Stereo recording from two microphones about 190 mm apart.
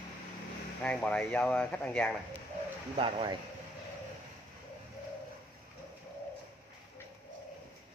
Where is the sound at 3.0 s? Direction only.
25° right (ahead or behind).